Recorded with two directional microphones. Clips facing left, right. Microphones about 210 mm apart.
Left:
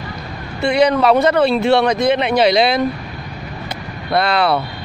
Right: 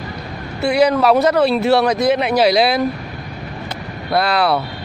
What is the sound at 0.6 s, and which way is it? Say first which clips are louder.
Speech: even; 5° right (ahead or behind).